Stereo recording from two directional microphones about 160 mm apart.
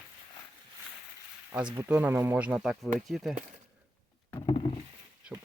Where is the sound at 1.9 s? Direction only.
10° right (ahead or behind).